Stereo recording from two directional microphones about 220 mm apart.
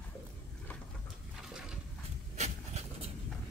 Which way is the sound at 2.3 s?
30° right (ahead or behind).